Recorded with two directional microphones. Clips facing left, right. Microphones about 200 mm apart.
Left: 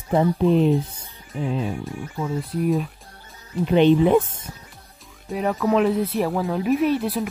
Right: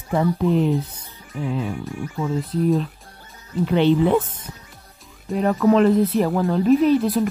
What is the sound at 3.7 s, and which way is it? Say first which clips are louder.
Speech: left 2 dB; 15° left (ahead or behind).